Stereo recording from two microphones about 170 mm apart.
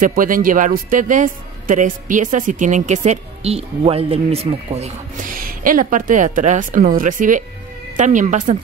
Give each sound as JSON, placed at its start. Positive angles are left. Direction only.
{"t": 0.0, "sound": "speech", "side_deg": -55}
{"t": 5.3, "sound": "speech", "side_deg": -55}